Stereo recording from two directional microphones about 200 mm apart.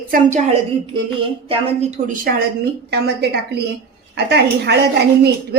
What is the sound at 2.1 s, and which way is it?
A woman's voice, 45° right (ahead or behind).